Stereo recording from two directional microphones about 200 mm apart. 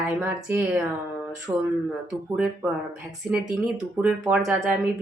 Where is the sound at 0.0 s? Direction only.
10° right (ahead or behind).